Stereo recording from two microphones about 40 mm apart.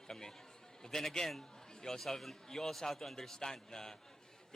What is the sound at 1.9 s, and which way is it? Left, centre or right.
Speech, centre.